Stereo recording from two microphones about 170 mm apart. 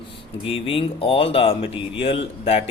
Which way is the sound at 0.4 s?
35° left (ahead or behind).